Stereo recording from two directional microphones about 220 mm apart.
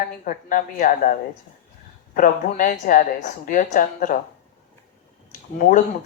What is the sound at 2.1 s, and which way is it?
Speech, 35° left (ahead or behind).